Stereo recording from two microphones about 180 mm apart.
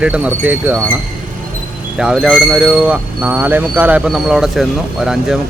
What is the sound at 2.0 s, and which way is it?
Speech, 5° right (ahead or behind).